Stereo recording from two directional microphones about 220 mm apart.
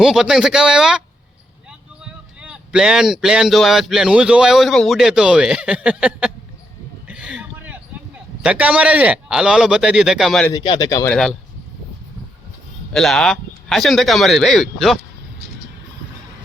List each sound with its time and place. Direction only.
0.0 s speech: centre (ahead or behind)
2.4 s speech: 5° right (ahead or behind)
7.1 s a sound: 5° right (ahead or behind)
10.5 s speech: 20° left (ahead or behind)
12.9 s speech: centre (ahead or behind)